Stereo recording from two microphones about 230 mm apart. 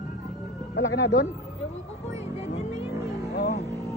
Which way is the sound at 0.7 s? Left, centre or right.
Left.